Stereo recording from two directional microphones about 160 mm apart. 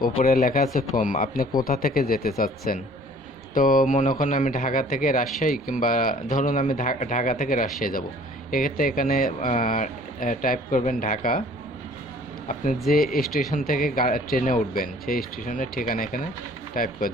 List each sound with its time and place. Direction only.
0.0 s speech: 65° left (ahead or behind)
12.9 s speech: 65° left (ahead or behind)
13.2 s speech: centre (ahead or behind)
13.5 s speech: 60° left (ahead or behind)